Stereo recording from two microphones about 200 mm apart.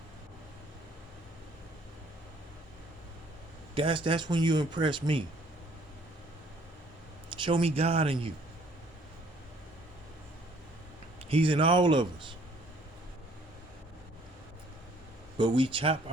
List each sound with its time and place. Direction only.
3.8 s speech: 25° right (ahead or behind)
7.4 s speech: 30° right (ahead or behind)
11.3 s speech: 25° right (ahead or behind)
15.4 s speech: 25° right (ahead or behind)